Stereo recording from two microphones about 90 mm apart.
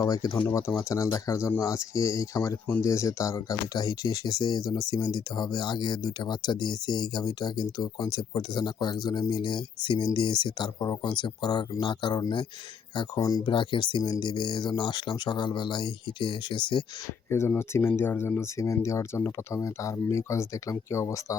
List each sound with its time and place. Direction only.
0.0 s speech: 40° left (ahead or behind); by 12.2 s 60° left (ahead or behind)
13.0 s speech: 45° left (ahead or behind)
13.5 s speech: 65° left (ahead or behind)
17.2 s speech: 30° left (ahead or behind)